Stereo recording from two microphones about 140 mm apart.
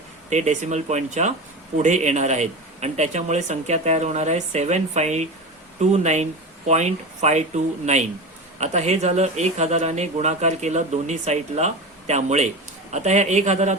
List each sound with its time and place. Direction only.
0.3 s speech: 55° right (ahead or behind)